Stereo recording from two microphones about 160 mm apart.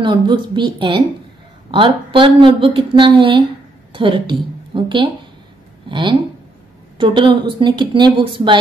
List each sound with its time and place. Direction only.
0.0 s a woman's voice: 30° right (ahead or behind)